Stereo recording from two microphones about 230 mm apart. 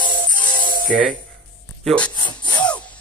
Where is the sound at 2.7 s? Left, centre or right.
Centre.